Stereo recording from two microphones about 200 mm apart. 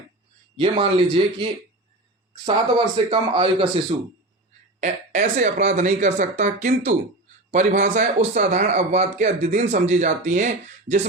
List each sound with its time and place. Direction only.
0.5 s speech: 25° right (ahead or behind)
4.8 s a man's voice: 35° right (ahead or behind)